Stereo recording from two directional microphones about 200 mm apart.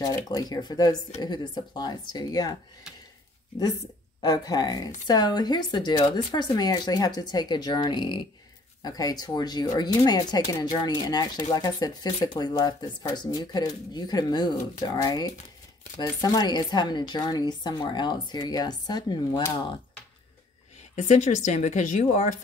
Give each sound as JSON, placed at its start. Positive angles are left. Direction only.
{"t": 0.0, "sound": "speech", "side_deg": 20}
{"t": 4.2, "sound": "speech", "side_deg": 20}
{"t": 20.9, "sound": "a woman's voice", "side_deg": 35}